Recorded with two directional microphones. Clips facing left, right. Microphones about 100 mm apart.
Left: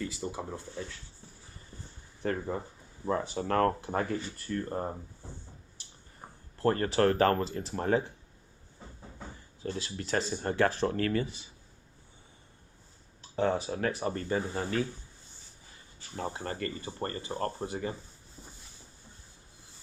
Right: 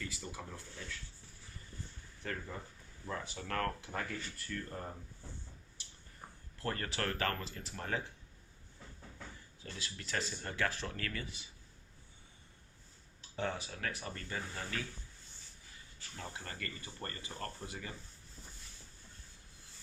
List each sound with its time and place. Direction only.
0.0 s speech: 25° left (ahead or behind)
2.2 s speech: 35° left (ahead or behind)
13.3 s speech: 35° left (ahead or behind)
16.0 s speech: 30° left (ahead or behind)